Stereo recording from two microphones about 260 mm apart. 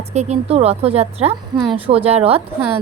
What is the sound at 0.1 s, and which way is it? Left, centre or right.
Speech, right.